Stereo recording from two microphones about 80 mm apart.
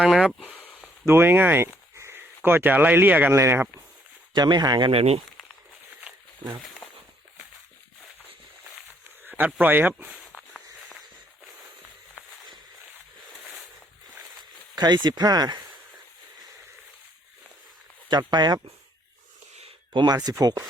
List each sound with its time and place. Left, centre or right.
0.0 s speech: centre
0.4 s a sound: centre
1.0 s speech: right
4.4 s speech: right
9.2 s a sound: centre
9.6 s speech: right
10.3 s walk: centre
14.8 s speech: right
18.1 s speech: right
19.9 s speech: right
20.4 s speech: right